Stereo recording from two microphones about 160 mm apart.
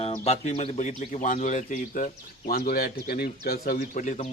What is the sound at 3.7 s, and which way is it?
Speech, 50° left (ahead or behind).